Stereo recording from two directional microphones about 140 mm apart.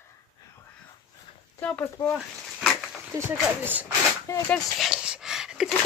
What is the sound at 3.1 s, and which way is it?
Speech, 15° right (ahead or behind).